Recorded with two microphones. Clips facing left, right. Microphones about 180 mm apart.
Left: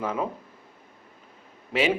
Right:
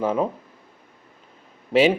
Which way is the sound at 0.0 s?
30° right (ahead or behind).